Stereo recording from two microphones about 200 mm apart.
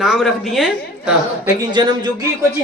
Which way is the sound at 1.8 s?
20° right (ahead or behind).